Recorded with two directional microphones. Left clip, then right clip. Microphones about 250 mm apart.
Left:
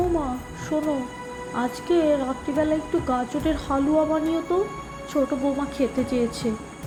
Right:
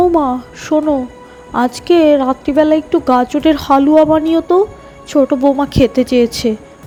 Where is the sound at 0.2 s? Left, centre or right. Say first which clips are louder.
Right 13 dB; right.